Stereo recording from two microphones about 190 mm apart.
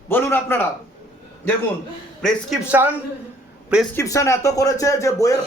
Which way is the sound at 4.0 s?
15° left (ahead or behind).